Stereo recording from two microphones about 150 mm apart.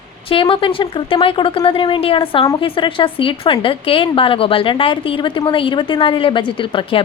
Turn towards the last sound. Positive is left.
turn(degrees=35)  # may be behind; listen again after turning